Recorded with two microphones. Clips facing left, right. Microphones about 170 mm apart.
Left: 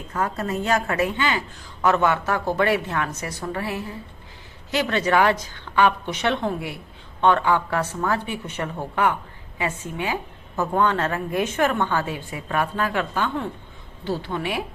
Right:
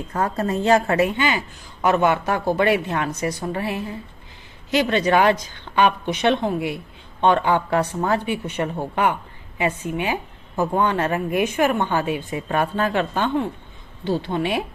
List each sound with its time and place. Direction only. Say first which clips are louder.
0.1 s a woman's voice: right 3 dB; 35° right (ahead or behind)
1.0 s a woman's voice: right 2 dB; 15° right (ahead or behind)